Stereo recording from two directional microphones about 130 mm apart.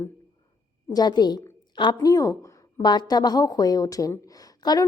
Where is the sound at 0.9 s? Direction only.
30° left (ahead or behind).